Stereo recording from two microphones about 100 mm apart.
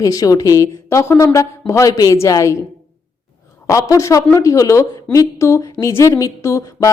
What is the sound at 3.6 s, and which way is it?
A woman's voice, 35° left (ahead or behind).